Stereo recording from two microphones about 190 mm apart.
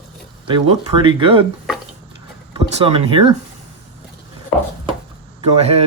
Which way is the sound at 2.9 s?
25° right (ahead or behind).